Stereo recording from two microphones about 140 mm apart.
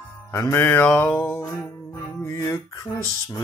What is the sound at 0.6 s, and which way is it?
Mantra, 10° left (ahead or behind).